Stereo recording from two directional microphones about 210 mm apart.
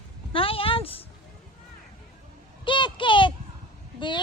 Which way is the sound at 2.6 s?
20° left (ahead or behind).